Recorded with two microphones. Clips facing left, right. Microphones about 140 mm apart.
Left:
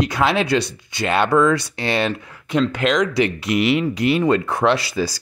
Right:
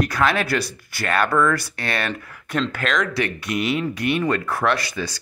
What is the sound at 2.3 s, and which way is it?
Speech, 10° left (ahead or behind).